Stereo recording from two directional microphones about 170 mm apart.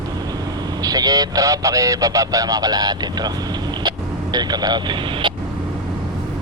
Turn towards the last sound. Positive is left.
turn(degrees=-25)  # may be behind; listen again after turning